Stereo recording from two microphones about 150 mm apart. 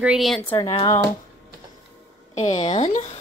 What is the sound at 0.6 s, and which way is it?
Speech, 20° left (ahead or behind).